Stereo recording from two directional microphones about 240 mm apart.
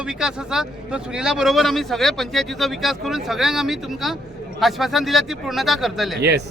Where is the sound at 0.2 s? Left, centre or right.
Centre.